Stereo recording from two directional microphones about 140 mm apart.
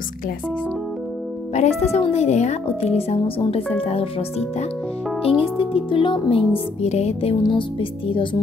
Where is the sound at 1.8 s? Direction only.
50° left (ahead or behind).